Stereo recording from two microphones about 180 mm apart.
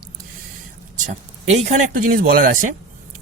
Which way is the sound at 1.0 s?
40° right (ahead or behind).